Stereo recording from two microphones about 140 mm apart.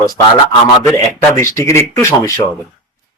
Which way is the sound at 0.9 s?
20° left (ahead or behind).